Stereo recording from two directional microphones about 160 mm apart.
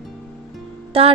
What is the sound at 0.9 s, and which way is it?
Speech, 35° right (ahead or behind).